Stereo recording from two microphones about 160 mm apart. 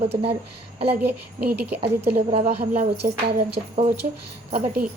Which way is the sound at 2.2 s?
45° right (ahead or behind).